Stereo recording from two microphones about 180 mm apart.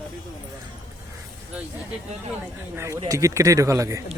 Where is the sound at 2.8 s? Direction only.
15° right (ahead or behind).